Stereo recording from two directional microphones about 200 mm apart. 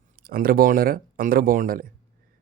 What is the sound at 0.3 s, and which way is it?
A man's voice, 50° right (ahead or behind).